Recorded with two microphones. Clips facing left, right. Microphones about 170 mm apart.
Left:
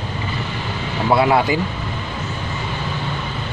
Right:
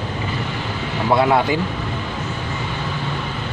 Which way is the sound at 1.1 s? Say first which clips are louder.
Left 1 dB; 5° left (ahead or behind).